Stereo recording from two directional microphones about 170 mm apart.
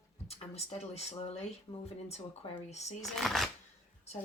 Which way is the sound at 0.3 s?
35° left (ahead or behind).